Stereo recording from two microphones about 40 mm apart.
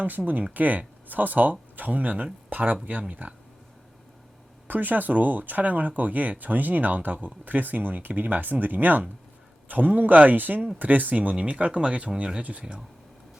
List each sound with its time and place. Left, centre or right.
0.0 s speech: right
4.7 s speech: right
11.1 s speech: right